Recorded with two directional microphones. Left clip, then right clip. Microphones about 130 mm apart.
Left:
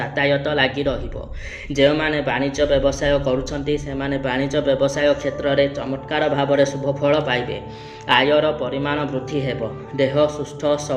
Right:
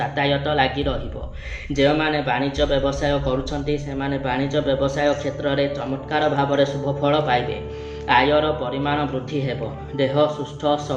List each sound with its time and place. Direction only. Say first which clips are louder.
0.0 s speech: left 2 dB; 45° left (ahead or behind)